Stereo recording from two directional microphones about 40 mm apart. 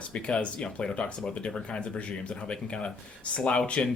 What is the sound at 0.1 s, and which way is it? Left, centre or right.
Speech, left.